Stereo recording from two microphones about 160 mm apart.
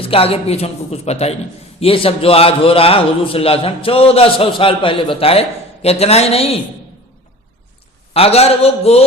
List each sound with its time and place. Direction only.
0.0 s a man's voice: 35° left (ahead or behind)
8.1 s a man's voice: 40° left (ahead or behind)